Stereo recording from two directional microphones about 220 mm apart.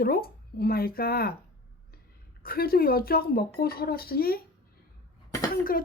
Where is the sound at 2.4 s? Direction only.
45° left (ahead or behind).